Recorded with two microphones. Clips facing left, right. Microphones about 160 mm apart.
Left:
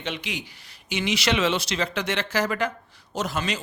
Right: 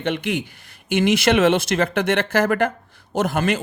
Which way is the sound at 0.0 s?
55° right (ahead or behind).